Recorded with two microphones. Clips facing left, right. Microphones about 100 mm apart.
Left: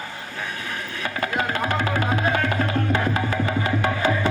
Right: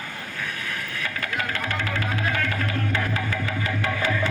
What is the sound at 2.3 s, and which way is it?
Music, 30° left (ahead or behind).